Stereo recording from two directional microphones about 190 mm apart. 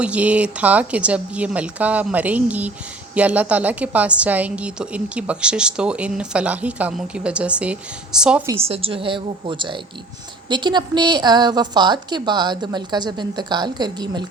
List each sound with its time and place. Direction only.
0.0 s a woman's voice: 5° right (ahead or behind)
8.5 s a woman's voice: 30° right (ahead or behind)